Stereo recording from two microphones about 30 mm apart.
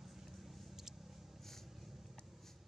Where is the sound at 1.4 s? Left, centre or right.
Centre.